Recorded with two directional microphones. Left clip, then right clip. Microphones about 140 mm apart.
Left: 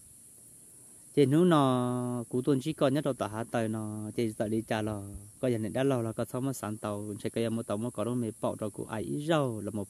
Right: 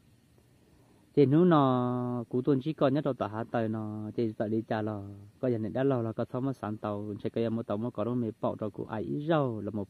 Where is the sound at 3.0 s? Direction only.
10° left (ahead or behind).